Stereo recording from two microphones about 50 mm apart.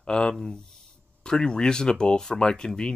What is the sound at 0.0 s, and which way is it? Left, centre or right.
Speech, centre.